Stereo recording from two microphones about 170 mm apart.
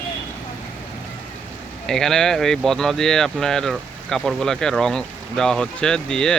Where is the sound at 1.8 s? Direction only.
5° left (ahead or behind).